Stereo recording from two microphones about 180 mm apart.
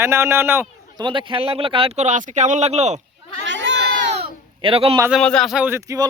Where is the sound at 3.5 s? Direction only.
85° right.